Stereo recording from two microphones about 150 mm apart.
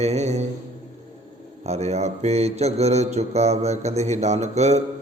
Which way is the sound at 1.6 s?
45° right (ahead or behind).